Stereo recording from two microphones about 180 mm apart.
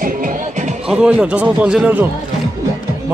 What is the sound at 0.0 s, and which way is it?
Music, 50° right (ahead or behind).